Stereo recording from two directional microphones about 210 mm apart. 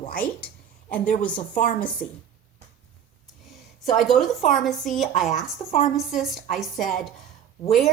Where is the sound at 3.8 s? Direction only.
Centre (ahead or behind).